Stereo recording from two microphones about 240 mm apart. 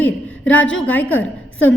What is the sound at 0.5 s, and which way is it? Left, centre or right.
Speech, left.